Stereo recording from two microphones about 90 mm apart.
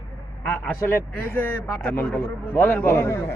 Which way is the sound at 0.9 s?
25° left (ahead or behind).